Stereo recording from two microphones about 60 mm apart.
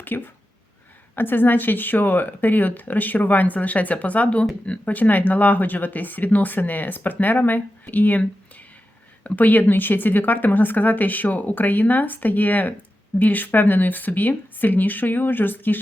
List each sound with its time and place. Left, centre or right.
0.0 s speech: left